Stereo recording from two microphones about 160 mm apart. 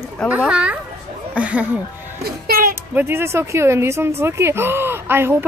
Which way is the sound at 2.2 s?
70° right (ahead or behind).